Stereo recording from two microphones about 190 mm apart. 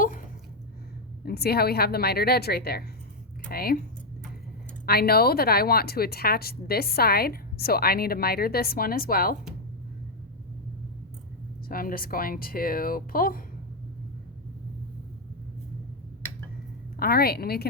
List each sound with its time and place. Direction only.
1.2 s a woman's voice: 55° left (ahead or behind)
4.9 s a woman's voice: 55° left (ahead or behind)
11.7 s a woman's voice: 50° left (ahead or behind)
17.0 s a woman's voice: 55° left (ahead or behind)